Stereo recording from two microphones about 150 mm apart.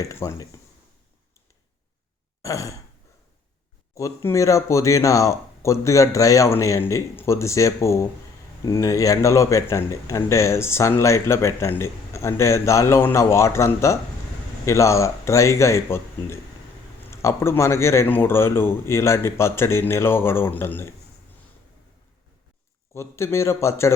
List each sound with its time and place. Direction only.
0.0 s speech: 20° left (ahead or behind)
2.4 s sigh: 20° left (ahead or behind)
3.9 s speech: 20° left (ahead or behind)
23.0 s speech: 15° left (ahead or behind)